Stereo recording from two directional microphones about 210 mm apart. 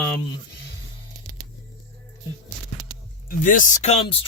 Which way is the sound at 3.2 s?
40° left (ahead or behind).